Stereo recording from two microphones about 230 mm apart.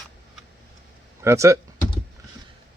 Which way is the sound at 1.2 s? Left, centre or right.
Centre.